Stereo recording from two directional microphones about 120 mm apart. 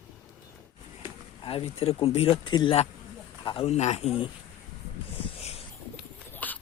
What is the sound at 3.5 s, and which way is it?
Speech, 55° left (ahead or behind).